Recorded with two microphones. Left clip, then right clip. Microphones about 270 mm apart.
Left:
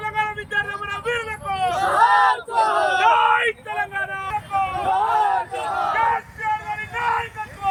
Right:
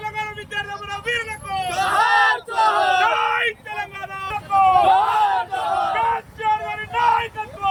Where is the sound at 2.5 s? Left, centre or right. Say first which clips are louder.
Right 1 dB; centre.